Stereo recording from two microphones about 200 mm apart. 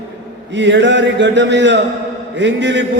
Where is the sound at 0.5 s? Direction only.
60° right (ahead or behind).